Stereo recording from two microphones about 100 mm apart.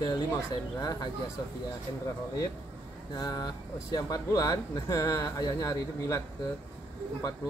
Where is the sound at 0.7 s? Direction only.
40° left (ahead or behind).